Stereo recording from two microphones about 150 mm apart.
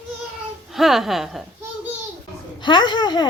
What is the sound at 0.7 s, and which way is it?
Speech, centre (ahead or behind).